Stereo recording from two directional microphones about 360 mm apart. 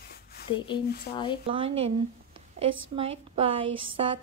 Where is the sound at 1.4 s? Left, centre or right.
Centre.